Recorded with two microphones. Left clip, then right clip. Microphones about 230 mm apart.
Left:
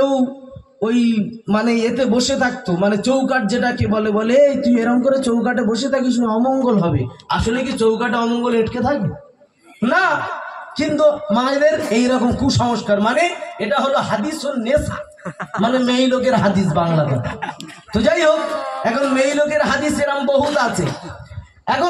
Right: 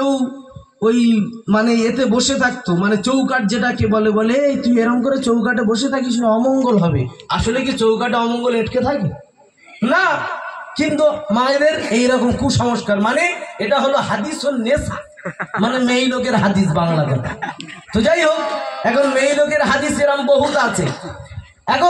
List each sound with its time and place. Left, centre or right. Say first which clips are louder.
0.8 s a man's voice: right 3 dB; right
15.2 s speech: right 4 dB; centre
15.6 s a man's voice: even; right
18.5 s a sound: even; left
18.8 s a man's voice: right 2 dB; right